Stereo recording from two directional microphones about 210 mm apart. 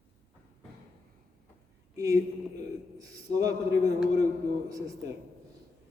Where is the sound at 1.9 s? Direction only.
15° right (ahead or behind).